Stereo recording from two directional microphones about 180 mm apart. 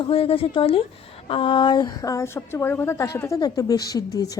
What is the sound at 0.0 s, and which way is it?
A woman's voice, 30° left (ahead or behind).